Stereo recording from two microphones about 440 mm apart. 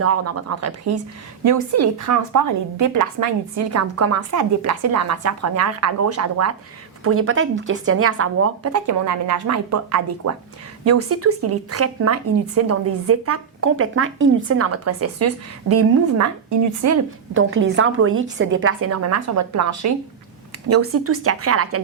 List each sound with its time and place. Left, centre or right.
0.0 s a woman's voice: right
16.8 s a woman's voice: right